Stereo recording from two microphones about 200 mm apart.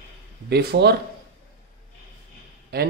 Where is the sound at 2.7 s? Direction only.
50° right (ahead or behind).